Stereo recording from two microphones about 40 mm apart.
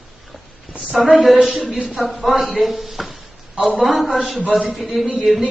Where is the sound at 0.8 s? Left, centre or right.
Centre.